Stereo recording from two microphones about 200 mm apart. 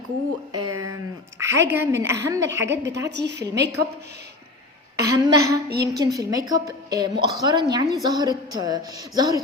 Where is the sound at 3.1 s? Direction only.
60° right (ahead or behind).